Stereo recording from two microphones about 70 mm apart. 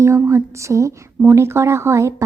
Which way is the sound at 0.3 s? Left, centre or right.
Right.